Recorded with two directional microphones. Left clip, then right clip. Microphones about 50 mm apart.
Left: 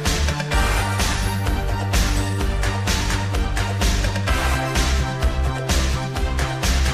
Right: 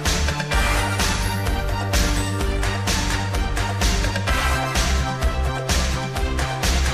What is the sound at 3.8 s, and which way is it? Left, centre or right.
Music, left.